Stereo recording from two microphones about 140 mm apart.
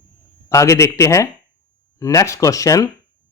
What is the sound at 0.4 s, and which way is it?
Speech, 20° left (ahead or behind).